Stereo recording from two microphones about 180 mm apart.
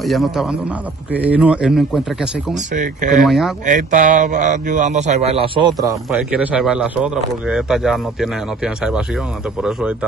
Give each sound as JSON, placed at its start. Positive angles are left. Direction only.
{"t": 0.0, "sound": "speech", "side_deg": 0}
{"t": 2.5, "sound": "speech", "side_deg": -45}
{"t": 3.3, "sound": "speech", "side_deg": 0}
{"t": 3.6, "sound": "a man's voice", "side_deg": -45}
{"t": 6.0, "sound": "speech", "side_deg": -5}